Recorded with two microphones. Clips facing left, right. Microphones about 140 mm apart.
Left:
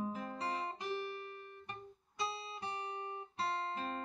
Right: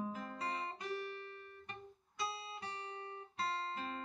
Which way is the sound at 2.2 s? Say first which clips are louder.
Left 2 dB; 25° left (ahead or behind).